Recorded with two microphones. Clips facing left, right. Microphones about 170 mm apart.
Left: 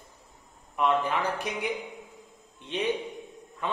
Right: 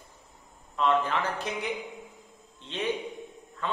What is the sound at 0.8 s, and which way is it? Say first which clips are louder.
A man's voice: even; 15° left (ahead or behind).